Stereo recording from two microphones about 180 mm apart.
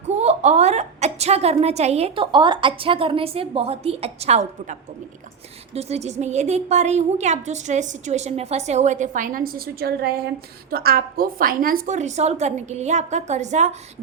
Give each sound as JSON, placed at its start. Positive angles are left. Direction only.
{"t": 0.1, "sound": "a woman's voice", "side_deg": -40}